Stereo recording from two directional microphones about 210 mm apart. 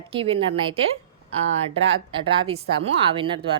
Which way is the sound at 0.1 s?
25° right (ahead or behind).